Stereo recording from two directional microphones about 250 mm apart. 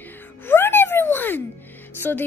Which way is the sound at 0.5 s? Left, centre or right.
Centre.